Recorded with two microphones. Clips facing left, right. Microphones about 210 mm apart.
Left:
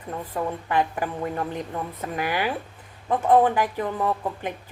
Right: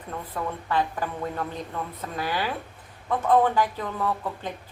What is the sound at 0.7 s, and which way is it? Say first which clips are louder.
A woman's voice: left 1 dB; 15° left (ahead or behind).